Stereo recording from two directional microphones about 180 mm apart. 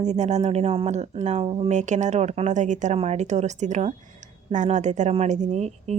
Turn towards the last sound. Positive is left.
turn(degrees=-40)  # may be behind; listen again after turning